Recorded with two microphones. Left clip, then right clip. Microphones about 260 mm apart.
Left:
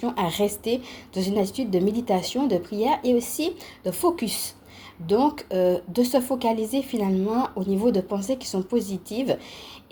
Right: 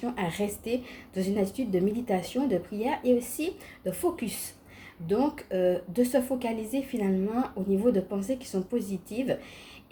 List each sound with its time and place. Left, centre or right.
0.0 s a woman's voice: left